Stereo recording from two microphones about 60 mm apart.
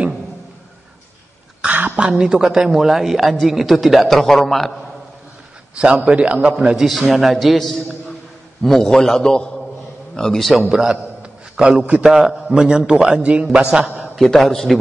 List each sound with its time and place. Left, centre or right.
1.6 s throat clearing: right
2.0 s a man's voice: centre
5.8 s a man's voice: centre
8.6 s a man's voice: centre
10.7 s a sound: centre
11.8 s a man's voice: right
12.1 s a man's voice: centre
14.2 s a man's voice: centre